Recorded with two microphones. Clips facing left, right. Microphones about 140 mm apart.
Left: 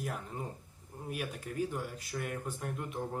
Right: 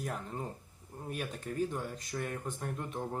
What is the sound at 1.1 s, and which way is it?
Speech, 10° left (ahead or behind).